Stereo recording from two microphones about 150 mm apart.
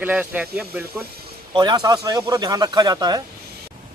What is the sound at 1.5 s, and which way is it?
Speech, 30° right (ahead or behind).